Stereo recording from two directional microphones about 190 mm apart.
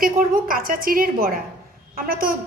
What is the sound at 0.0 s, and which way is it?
A woman's voice, 50° right (ahead or behind).